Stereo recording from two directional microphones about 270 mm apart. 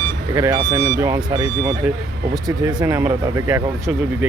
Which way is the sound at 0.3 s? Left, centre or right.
Centre.